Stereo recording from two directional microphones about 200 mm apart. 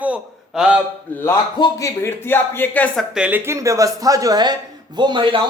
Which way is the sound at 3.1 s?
5° right (ahead or behind).